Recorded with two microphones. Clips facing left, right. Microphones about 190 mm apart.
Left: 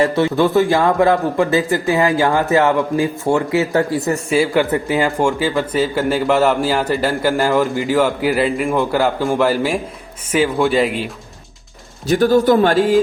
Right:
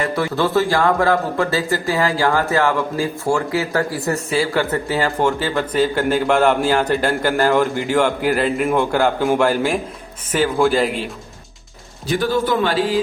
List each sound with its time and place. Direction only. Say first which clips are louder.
0.0 s a man's voice: left 5 dB; 25° left (ahead or behind); by 11.1 s centre (ahead or behind)
12.0 s a man's voice: left 6 dB; 45° left (ahead or behind)